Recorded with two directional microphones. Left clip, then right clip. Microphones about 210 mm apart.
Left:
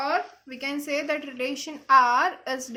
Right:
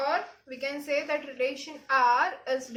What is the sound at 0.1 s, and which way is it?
A woman's voice, 50° left (ahead or behind).